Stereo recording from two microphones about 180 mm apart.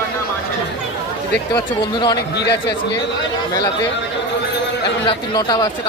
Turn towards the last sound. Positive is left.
turn(degrees=20)  # may be behind; listen again after turning